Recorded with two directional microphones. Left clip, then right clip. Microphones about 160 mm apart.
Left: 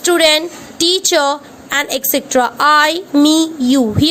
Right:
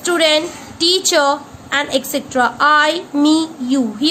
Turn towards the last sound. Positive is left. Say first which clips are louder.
# left 4 dB
turn(degrees=45)  # may be behind; listen again after turning